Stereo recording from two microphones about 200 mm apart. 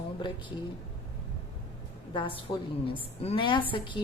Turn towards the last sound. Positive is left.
turn(degrees=25)  # may be behind; listen again after turning